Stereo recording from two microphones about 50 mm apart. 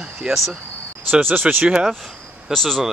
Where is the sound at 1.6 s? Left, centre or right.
Centre.